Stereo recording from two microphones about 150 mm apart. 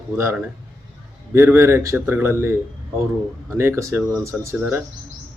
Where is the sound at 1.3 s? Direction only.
15° right (ahead or behind).